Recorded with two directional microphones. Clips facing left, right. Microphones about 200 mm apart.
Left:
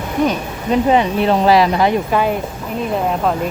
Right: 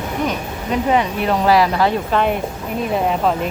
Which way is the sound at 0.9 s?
25° left (ahead or behind).